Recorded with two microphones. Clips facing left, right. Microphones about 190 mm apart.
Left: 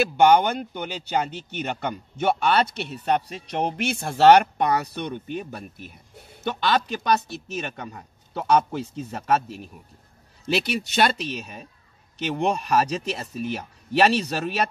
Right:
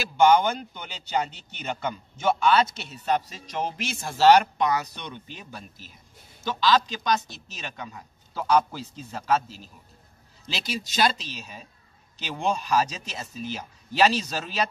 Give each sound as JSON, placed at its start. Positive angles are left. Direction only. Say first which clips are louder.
{"t": 0.0, "sound": "speech", "louder": "left 2 dB", "side_deg": 60}